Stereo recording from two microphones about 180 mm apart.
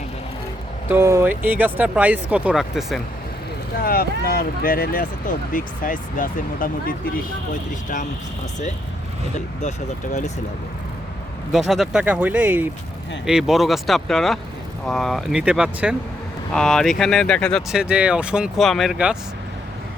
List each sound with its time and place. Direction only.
0.9 s speech: 15° right (ahead or behind)
3.8 s speech: 55° left (ahead or behind)
9.3 s speech: 40° left (ahead or behind)
11.5 s speech: centre (ahead or behind)